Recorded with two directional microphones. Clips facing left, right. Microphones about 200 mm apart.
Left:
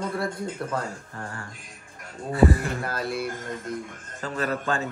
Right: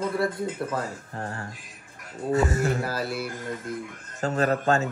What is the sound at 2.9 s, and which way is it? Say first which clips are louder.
Speech: left 1 dB; 5° right (ahead or behind).